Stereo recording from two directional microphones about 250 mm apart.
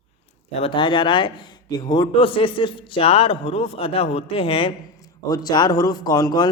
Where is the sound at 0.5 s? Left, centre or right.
Left.